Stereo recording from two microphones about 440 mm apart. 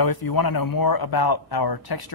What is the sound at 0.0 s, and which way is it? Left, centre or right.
A man's voice, left.